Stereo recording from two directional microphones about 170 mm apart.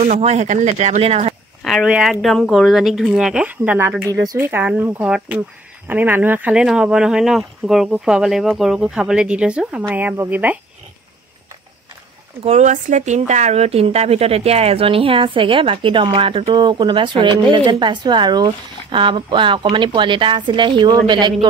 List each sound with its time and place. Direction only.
0.0 s a woman's voice: 45° right (ahead or behind)
1.6 s speech: centre (ahead or behind)
12.4 s a woman's voice: 45° right (ahead or behind); by 21.5 s 25° right (ahead or behind)